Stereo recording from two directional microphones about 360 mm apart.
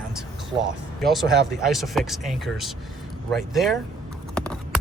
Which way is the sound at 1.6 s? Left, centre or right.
Centre.